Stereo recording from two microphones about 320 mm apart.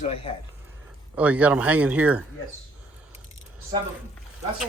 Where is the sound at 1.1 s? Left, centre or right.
Centre.